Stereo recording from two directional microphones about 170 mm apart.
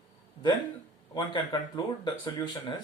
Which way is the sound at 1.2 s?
25° left (ahead or behind).